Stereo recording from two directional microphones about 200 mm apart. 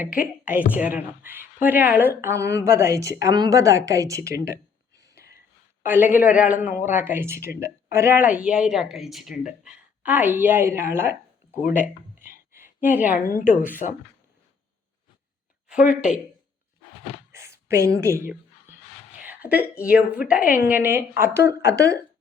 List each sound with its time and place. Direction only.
0.7 s speech: 5° right (ahead or behind)
5.1 s a sound: 50° left (ahead or behind)
5.8 s a woman's voice: 10° right (ahead or behind)
12.2 s a sound: 10° right (ahead or behind)
13.2 s speech: 45° left (ahead or behind)
13.8 s speech: 35° left (ahead or behind)
15.8 s speech: 40° left (ahead or behind)
17.3 s a sound: 15° right (ahead or behind)
17.9 s speech: 15° right (ahead or behind)
19.2 s a sound: 10° right (ahead or behind)
19.8 s speech: 5° right (ahead or behind)
20.4 s speech: 45° left (ahead or behind)
20.7 s speech: 10° right (ahead or behind)